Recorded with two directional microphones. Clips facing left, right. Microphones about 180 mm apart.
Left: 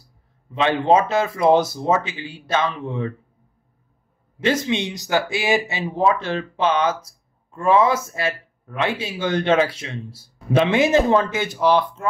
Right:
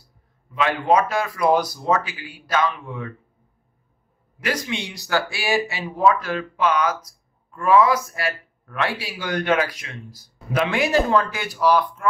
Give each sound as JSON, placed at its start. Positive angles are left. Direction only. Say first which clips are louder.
{"t": 0.5, "sound": "speech", "louder": "left 3 dB", "side_deg": 25}
{"t": 4.4, "sound": "speech", "louder": "left 6 dB", "side_deg": 25}